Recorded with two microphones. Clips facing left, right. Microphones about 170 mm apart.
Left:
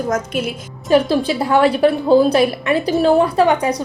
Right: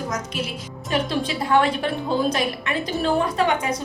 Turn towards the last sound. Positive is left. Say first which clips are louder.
# left 7 dB
turn(degrees=35)  # may be behind; listen again after turning